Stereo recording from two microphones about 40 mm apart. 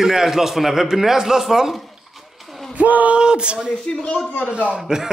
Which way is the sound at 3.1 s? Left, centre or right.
Right.